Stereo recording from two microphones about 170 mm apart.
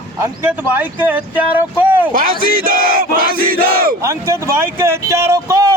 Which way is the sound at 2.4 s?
55° right (ahead or behind).